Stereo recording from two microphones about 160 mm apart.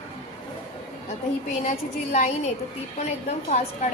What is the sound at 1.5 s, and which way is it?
A woman's voice, 45° left (ahead or behind).